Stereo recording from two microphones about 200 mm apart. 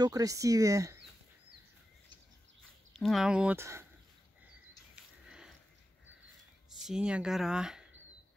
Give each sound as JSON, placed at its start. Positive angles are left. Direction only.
{"t": 0.0, "sound": "speech", "side_deg": -15}
{"t": 2.9, "sound": "speech", "side_deg": 0}
{"t": 4.9, "sound": "a sound", "side_deg": -5}
{"t": 6.8, "sound": "speech", "side_deg": -5}